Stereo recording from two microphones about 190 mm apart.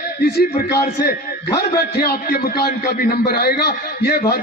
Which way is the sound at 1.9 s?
55° left (ahead or behind).